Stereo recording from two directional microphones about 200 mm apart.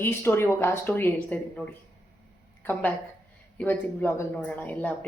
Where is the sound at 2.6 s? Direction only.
10° left (ahead or behind).